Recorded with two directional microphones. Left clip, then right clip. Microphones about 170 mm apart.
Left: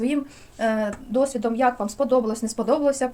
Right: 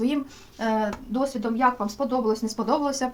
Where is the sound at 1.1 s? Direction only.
50° left (ahead or behind).